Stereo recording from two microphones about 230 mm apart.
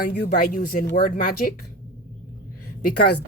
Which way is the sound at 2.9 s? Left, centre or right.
Left.